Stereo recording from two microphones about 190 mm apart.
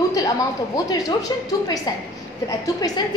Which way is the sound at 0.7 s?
20° left (ahead or behind).